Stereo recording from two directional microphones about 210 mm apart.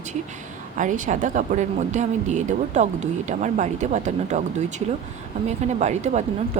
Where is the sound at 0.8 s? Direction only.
35° right (ahead or behind).